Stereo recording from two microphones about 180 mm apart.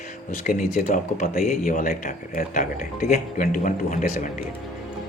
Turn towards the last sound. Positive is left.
turn(degrees=45)  # may be behind; listen again after turning